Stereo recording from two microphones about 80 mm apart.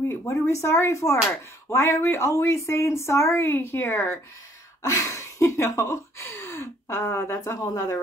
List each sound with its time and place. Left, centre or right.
0.1 s speech: left
4.8 s speech: left